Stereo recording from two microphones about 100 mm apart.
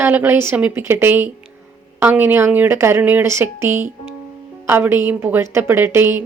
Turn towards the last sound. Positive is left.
turn(degrees=-25)  # may be behind; listen again after turning